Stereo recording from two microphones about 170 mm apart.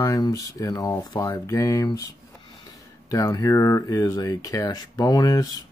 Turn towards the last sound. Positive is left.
turn(degrees=20)  # may be behind; listen again after turning